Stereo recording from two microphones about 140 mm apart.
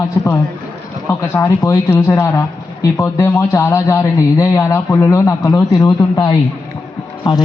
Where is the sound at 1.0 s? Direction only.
20° left (ahead or behind).